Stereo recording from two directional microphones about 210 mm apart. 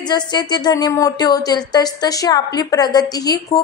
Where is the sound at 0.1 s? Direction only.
20° left (ahead or behind).